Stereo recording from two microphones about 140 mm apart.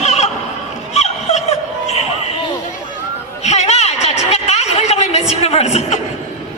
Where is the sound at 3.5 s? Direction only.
50° left (ahead or behind).